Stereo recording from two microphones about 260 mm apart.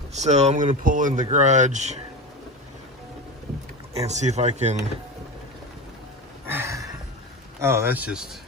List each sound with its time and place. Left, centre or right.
0.2 s speech: right
3.9 s speech: right
6.5 s a sound: centre
7.6 s speech: centre